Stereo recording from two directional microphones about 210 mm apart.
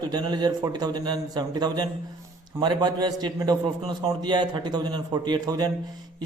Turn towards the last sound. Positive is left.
turn(degrees=-20)  # may be behind; listen again after turning